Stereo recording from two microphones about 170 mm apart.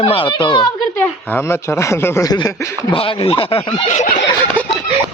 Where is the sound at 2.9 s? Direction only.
30° left (ahead or behind).